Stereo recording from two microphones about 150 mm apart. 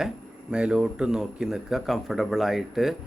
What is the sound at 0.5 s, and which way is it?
A man's voice, 5° right (ahead or behind).